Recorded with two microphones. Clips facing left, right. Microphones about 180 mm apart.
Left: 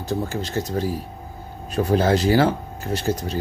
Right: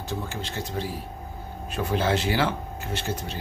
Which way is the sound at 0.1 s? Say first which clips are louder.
Left 8 dB; 40° left (ahead or behind).